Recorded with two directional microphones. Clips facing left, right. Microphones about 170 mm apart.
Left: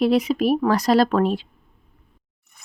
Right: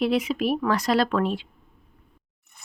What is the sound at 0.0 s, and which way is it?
Speech, 40° left (ahead or behind).